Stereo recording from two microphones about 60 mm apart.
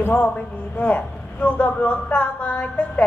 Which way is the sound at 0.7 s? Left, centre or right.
Left.